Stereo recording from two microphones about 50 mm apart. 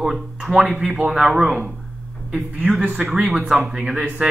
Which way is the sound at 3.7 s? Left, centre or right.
Centre.